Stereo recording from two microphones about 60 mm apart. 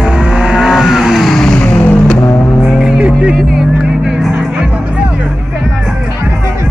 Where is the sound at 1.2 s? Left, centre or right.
Centre.